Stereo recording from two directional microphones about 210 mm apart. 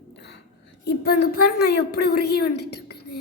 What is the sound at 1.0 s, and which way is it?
A woman's voice, 45° left (ahead or behind).